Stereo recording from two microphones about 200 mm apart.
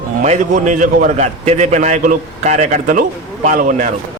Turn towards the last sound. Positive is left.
turn(degrees=-40)  # may be behind; listen again after turning